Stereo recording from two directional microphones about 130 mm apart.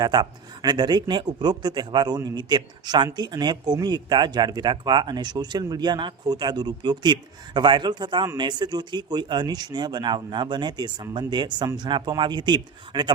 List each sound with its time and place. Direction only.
0.0 s a man's voice: 35° right (ahead or behind)